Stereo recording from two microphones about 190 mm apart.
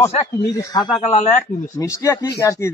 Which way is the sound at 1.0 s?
35° left (ahead or behind).